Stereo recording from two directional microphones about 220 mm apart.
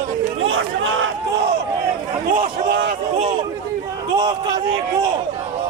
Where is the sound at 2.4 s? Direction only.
40° right (ahead or behind).